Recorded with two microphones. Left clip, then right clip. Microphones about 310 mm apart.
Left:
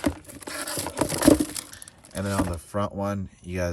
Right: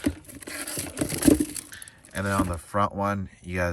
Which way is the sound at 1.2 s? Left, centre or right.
Centre.